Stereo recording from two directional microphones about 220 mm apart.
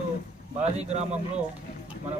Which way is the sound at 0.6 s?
30° right (ahead or behind).